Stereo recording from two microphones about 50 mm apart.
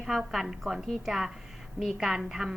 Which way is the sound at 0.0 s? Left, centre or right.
Centre.